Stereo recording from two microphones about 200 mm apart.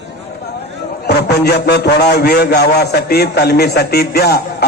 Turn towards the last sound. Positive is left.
turn(degrees=50)  # may be behind; listen again after turning